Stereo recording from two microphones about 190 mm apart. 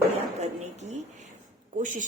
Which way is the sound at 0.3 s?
35° right (ahead or behind).